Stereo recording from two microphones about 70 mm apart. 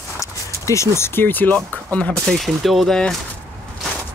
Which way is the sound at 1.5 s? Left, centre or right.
Left.